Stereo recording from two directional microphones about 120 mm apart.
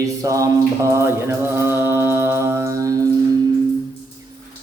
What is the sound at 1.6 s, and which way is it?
Mantra, 20° right (ahead or behind).